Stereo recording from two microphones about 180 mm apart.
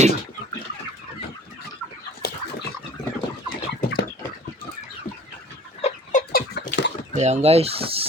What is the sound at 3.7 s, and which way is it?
Bird, 75° left (ahead or behind).